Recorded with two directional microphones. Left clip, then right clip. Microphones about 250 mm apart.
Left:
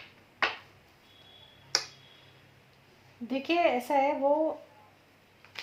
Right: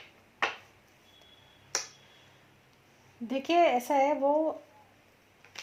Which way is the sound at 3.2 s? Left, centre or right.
Right.